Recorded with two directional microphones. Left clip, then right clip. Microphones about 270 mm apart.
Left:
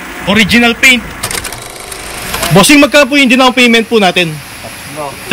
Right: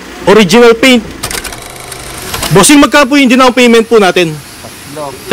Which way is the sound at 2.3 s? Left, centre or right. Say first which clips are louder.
Right 1 dB; centre.